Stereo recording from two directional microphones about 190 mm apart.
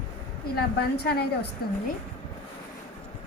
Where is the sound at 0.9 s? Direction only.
60° left (ahead or behind).